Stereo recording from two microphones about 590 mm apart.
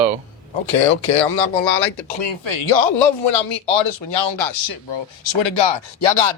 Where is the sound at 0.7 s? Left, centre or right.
Left.